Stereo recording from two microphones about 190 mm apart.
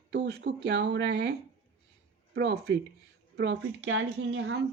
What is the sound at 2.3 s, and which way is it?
Speech, 55° right (ahead or behind).